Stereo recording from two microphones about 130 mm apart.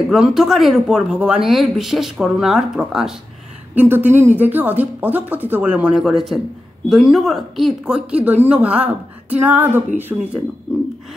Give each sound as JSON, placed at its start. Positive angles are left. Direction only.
{"t": 0.1, "sound": "speech", "side_deg": 0}
{"t": 3.7, "sound": "a woman's voice", "side_deg": -15}